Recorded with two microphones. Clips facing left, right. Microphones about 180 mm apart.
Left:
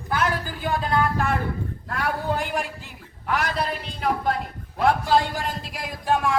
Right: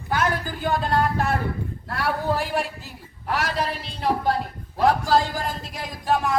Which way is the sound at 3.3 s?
35° right (ahead or behind).